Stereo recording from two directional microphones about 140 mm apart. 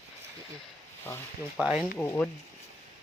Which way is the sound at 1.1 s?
20° left (ahead or behind).